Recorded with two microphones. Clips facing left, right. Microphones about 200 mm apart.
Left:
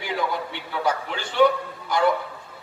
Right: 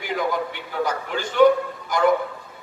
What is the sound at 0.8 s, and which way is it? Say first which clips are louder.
Speech: even; 45° right (ahead or behind).